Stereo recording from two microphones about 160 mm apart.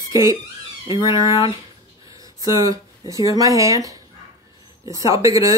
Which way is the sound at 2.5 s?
20° right (ahead or behind).